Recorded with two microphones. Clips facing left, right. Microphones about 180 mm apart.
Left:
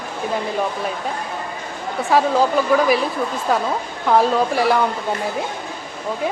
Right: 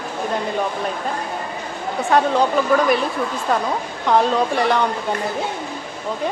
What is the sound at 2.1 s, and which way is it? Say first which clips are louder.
Speech: left 1 dB; 5° left (ahead or behind).